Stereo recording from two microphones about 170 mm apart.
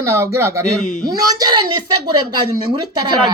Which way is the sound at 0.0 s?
15° right (ahead or behind).